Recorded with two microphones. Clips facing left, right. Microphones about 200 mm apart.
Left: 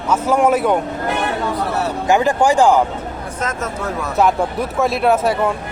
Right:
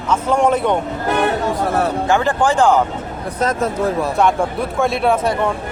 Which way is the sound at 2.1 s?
10° left (ahead or behind).